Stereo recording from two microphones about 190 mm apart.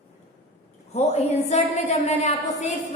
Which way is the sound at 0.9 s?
35° left (ahead or behind).